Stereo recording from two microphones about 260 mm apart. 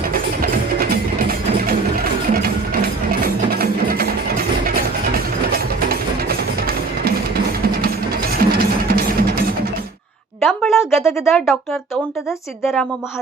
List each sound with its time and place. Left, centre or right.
0.1 s music: right
3.1 s music: right
10.4 s a sound: centre
11.0 s speech: centre